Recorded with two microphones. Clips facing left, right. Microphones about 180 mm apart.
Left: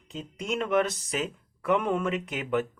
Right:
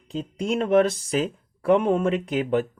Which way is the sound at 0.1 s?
35° right (ahead or behind).